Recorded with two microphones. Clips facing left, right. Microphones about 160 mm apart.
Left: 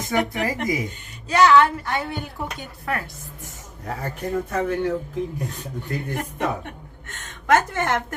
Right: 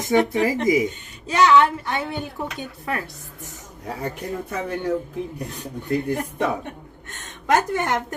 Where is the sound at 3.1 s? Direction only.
15° left (ahead or behind).